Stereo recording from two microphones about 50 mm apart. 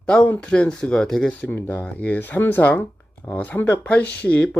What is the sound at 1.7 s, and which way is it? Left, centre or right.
Speech, left.